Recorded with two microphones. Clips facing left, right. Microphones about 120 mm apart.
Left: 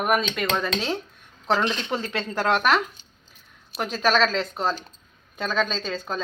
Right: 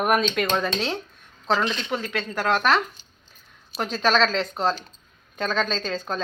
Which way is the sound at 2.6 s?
10° left (ahead or behind).